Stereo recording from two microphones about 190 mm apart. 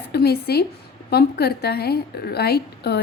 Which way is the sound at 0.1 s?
55° left (ahead or behind).